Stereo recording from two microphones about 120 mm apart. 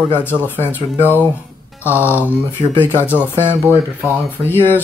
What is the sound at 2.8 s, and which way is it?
Speech, 20° left (ahead or behind).